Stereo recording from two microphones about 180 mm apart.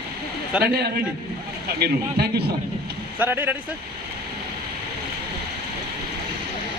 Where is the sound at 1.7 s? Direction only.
60° right (ahead or behind).